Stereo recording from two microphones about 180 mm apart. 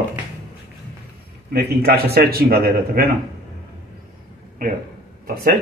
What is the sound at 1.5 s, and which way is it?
A man's voice, 60° right (ahead or behind).